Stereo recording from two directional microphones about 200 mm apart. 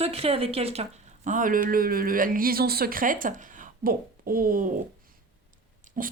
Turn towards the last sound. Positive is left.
turn(degrees=-45)  # may be behind; listen again after turning